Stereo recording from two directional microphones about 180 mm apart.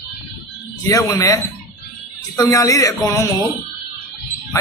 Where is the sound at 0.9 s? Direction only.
20° left (ahead or behind).